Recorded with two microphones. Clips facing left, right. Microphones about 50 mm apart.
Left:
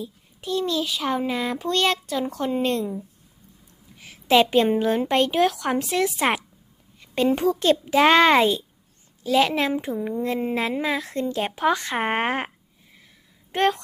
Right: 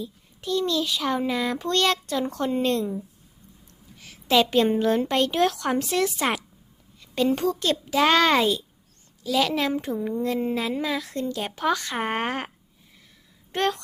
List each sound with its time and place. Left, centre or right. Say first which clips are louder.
0.0 s a sound: even; centre
0.6 s a child's voice: even; centre
3.9 s a sound: left 3 dB; left
4.5 s a child's voice: left 1 dB; centre
5.4 s a child's voice: left 1 dB; centre
7.3 s a child's voice: left 5 dB; left
9.7 s a child's voice: left 1 dB; centre
13.5 s a child's voice: left 4 dB; left